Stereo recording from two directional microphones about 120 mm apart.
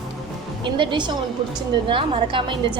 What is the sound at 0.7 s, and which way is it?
A woman's voice, 45° right (ahead or behind).